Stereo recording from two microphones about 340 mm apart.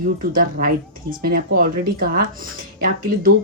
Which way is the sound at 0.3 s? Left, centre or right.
Right.